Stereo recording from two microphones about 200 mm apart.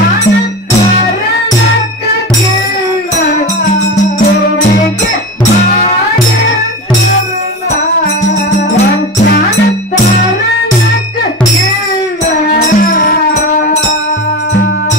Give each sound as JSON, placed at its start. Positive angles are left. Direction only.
{"t": 12.5, "sound": "music", "side_deg": 40}